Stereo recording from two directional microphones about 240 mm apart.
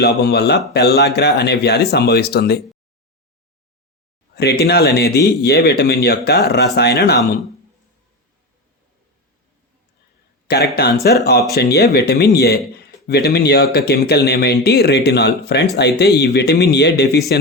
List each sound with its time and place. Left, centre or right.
0.0 s a man's voice: left
4.4 s a man's voice: left
10.8 s a man's voice: left